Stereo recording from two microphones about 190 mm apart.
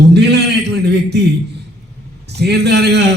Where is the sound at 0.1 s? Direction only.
60° right (ahead or behind).